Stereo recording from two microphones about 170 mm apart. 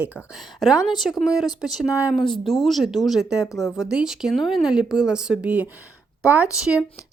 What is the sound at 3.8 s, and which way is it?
Speech, 5° right (ahead or behind).